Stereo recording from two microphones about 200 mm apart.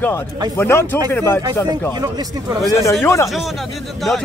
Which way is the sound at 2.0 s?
15° right (ahead or behind).